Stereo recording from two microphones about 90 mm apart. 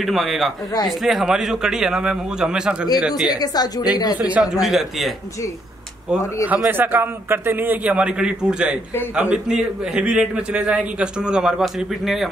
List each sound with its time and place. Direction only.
0.0 s a man's voice: centre (ahead or behind)
3.2 s speech: 50° left (ahead or behind)
4.2 s a man's voice: 5° right (ahead or behind)
6.0 s a man's voice: 15° right (ahead or behind)